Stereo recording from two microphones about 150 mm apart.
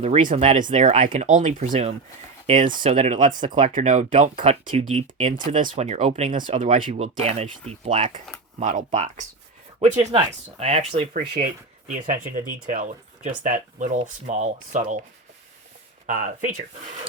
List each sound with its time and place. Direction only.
0.0 s speech: 55° right (ahead or behind)
4.8 s speech: 45° right (ahead or behind)
11.9 s speech: 60° right (ahead or behind)
16.0 s speech: 60° right (ahead or behind)